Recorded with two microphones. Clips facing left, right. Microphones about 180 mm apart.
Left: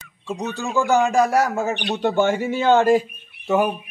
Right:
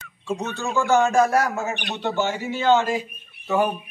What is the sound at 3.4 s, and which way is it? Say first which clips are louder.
Speech: left 2 dB; 20° left (ahead or behind).